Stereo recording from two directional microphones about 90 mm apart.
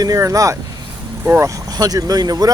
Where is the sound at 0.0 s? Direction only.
40° right (ahead or behind).